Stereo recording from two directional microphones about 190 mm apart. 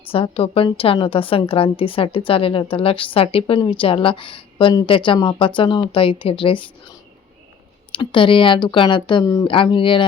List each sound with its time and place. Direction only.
0.0 s a woman's voice: 30° left (ahead or behind)
7.9 s a woman's voice: 25° left (ahead or behind)